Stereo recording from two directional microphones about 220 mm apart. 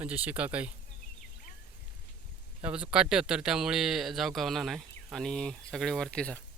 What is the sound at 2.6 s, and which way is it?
Speech, 5° right (ahead or behind).